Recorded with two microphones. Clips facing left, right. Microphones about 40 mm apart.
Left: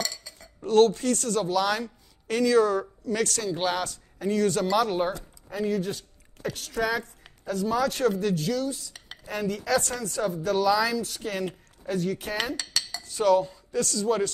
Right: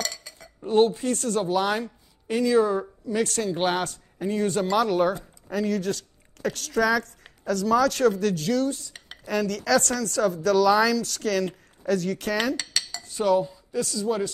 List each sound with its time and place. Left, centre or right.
0.0 s dishes: right
0.7 s speech: right
2.4 s speech: right
3.3 s speech: right
4.6 s speech: right
5.5 s a woman's voice: right
9.2 s a woman's voice: right
13.2 s speech: right